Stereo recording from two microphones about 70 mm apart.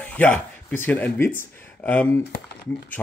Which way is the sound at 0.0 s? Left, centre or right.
Left.